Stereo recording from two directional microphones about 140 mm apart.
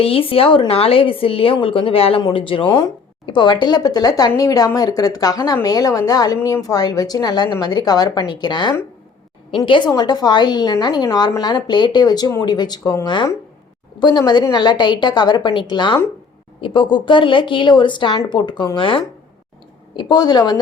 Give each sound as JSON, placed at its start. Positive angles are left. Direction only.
{"t": 0.0, "sound": "a woman's voice", "side_deg": 40}